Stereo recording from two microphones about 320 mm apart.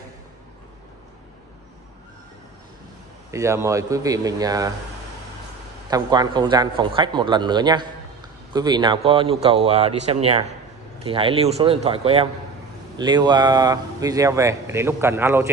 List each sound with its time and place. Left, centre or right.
3.3 s speech: centre
5.9 s speech: centre